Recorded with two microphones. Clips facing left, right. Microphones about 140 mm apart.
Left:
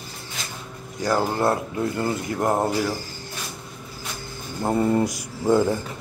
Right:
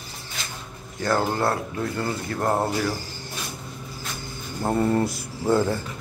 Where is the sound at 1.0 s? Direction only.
15° left (ahead or behind).